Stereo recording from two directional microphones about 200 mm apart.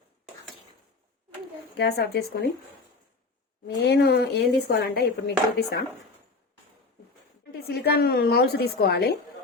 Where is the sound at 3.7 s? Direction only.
55° left (ahead or behind).